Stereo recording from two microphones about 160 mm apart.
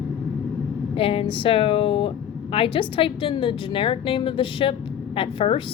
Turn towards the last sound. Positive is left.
turn(degrees=35)  # may be behind; listen again after turning